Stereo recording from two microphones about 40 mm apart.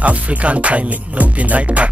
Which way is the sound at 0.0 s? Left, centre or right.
Right.